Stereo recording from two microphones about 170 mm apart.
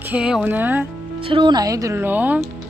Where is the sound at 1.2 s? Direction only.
30° right (ahead or behind); by 2.5 s 10° right (ahead or behind).